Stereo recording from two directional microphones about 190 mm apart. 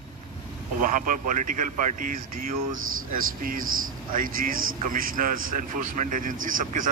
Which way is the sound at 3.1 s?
45° right (ahead or behind).